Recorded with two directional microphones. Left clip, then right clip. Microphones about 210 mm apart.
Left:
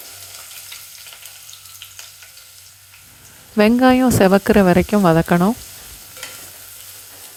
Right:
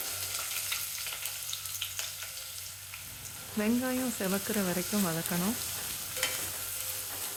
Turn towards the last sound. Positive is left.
turn(degrees=40)  # may be behind; listen again after turning